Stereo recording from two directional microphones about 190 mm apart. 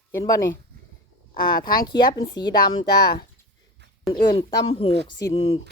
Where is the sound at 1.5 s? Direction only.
50° left (ahead or behind).